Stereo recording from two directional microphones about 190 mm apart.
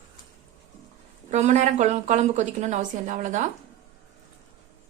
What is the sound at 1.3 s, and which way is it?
A woman's voice, 40° right (ahead or behind).